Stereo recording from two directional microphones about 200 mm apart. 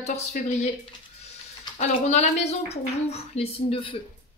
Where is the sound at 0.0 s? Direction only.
35° left (ahead or behind).